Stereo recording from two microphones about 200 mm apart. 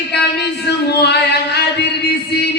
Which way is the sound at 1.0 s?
55° left (ahead or behind).